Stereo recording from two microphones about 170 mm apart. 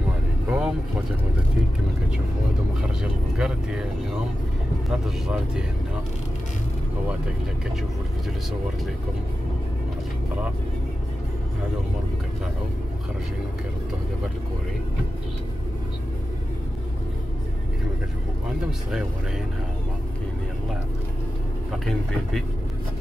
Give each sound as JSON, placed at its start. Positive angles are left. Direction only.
{"t": 0.5, "sound": "vehicle", "side_deg": -5}
{"t": 3.0, "sound": "speech", "side_deg": -5}
{"t": 4.8, "sound": "speech", "side_deg": -5}